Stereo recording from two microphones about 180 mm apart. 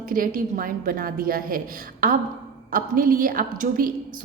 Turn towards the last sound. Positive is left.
turn(degrees=-50)  # may be behind; listen again after turning